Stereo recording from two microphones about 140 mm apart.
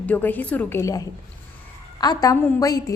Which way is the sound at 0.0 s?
10° left (ahead or behind).